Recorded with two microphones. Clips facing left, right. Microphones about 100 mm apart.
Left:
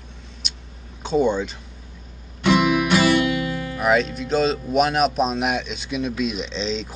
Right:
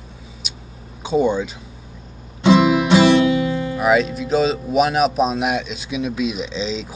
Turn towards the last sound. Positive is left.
turn(degrees=-5)  # may be behind; listen again after turning